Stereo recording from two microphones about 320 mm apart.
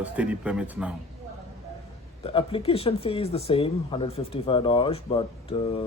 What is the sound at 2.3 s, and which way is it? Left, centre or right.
Speech, centre.